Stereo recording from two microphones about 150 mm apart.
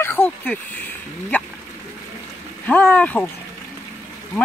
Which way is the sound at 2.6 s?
10° left (ahead or behind).